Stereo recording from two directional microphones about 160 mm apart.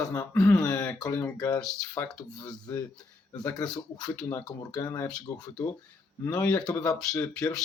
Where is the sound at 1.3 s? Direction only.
25° left (ahead or behind).